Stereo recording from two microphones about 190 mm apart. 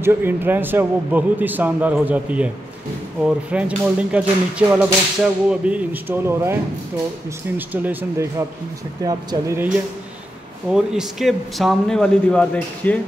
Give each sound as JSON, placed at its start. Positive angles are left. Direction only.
{"t": 0.0, "sound": "a man's voice", "side_deg": -10}
{"t": 3.5, "sound": "a man's voice", "side_deg": -5}
{"t": 10.7, "sound": "speech", "side_deg": -5}